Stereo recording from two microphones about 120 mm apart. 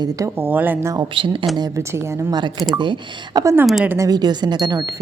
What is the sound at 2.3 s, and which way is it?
Speech, 35° right (ahead or behind).